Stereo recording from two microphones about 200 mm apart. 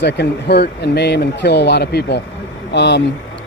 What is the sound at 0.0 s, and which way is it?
Speech, 60° left (ahead or behind).